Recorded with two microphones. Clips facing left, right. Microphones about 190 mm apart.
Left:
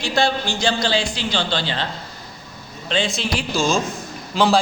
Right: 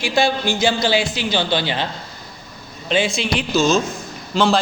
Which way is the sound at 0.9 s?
15° right (ahead or behind).